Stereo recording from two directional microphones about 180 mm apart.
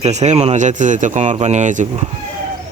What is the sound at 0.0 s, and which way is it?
Speech, 40° right (ahead or behind).